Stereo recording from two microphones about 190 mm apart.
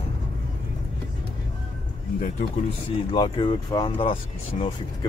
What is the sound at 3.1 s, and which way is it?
Speech, 25° left (ahead or behind).